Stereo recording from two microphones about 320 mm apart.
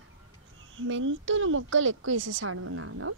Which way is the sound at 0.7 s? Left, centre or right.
Right.